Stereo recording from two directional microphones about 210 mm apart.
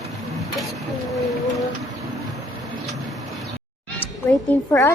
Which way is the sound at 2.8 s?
Centre (ahead or behind).